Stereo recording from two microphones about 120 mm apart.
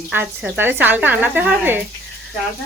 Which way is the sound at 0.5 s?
15° right (ahead or behind).